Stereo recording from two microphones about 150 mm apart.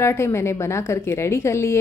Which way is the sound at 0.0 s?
15° left (ahead or behind).